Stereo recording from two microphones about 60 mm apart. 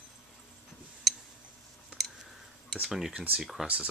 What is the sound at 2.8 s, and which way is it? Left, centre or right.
Speech, centre.